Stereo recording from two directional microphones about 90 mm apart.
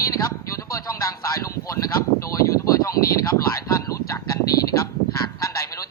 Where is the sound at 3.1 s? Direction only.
35° left (ahead or behind).